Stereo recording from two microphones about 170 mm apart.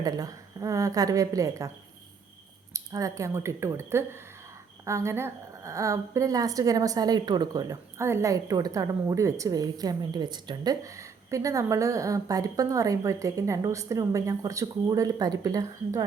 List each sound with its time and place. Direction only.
0.0 s a woman's voice: 20° right (ahead or behind)
2.7 s a woman's voice: 20° right (ahead or behind)